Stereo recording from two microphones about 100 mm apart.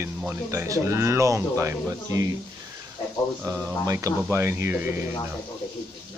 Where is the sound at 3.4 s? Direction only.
30° right (ahead or behind).